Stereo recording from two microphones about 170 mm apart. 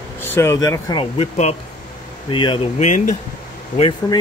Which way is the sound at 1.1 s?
40° left (ahead or behind).